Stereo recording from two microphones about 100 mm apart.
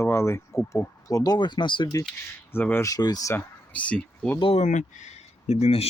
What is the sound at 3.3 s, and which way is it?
Speech, 15° left (ahead or behind).